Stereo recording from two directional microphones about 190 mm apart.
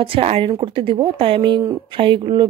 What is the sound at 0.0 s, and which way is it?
Speech, 30° right (ahead or behind).